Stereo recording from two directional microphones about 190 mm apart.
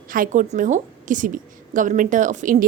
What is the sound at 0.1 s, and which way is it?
A woman's voice, 45° right (ahead or behind).